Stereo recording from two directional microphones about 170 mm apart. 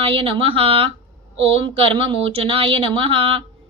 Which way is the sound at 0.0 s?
30° right (ahead or behind).